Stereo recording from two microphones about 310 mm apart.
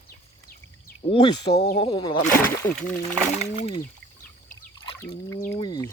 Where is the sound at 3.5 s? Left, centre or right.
Left.